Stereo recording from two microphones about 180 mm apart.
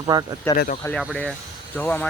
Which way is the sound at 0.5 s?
15° left (ahead or behind).